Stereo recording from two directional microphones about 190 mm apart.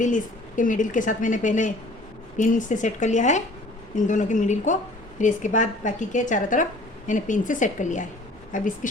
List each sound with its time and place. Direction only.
0.0 s a woman's voice: 40° left (ahead or behind)